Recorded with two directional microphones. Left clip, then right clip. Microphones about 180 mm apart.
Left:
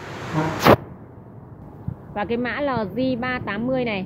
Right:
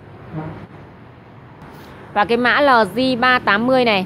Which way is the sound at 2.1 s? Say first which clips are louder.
Right 10 dB; 20° right (ahead or behind).